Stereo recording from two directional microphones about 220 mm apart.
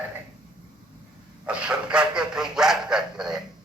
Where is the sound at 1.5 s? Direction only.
5° right (ahead or behind).